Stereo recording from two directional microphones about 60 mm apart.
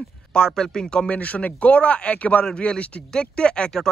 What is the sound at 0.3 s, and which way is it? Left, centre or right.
Speech, centre.